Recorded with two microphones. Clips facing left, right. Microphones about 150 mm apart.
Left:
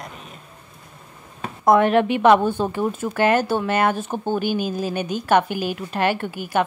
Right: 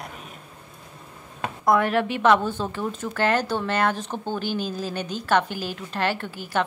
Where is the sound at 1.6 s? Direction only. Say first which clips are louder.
Left 5 dB; 20° left (ahead or behind).